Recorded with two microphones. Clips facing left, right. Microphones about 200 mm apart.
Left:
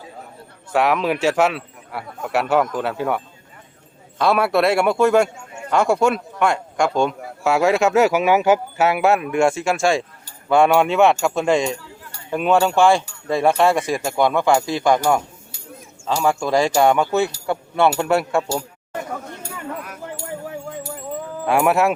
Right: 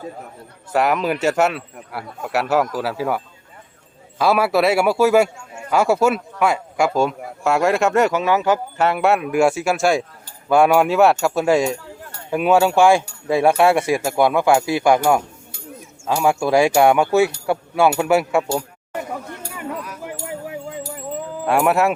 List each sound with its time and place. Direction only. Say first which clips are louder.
0.7 s a man's voice: even; centre (ahead or behind)
4.2 s a man's voice: right 1 dB; 5° right (ahead or behind)
8.2 s a man's voice: left 2 dB; 15° left (ahead or behind); by 18.6 s 10° right (ahead or behind)
21.4 s a man's voice: even; centre (ahead or behind)